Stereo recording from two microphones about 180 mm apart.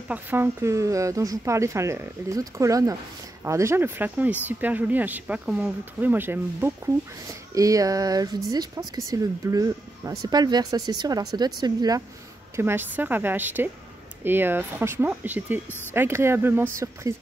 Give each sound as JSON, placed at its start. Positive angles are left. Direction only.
{"t": 0.1, "sound": "speech", "side_deg": -10}